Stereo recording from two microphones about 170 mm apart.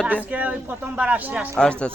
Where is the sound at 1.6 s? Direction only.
5° left (ahead or behind).